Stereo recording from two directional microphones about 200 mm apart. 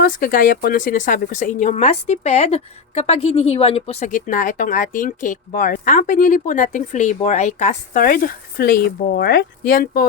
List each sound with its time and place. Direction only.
0.0 s speech: 45° left (ahead or behind)